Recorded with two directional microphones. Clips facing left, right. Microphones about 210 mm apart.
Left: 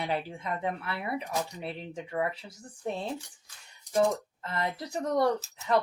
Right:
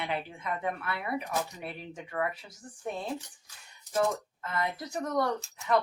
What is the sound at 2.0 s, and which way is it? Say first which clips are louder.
Speech: left 1 dB; 25° left (ahead or behind).